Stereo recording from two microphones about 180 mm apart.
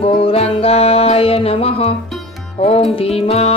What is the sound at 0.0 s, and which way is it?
Music, 35° left (ahead or behind).